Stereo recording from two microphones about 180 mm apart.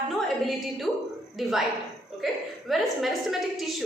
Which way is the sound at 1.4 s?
Centre (ahead or behind).